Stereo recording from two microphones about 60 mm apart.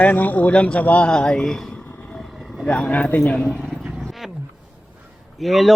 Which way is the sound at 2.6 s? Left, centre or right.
Left.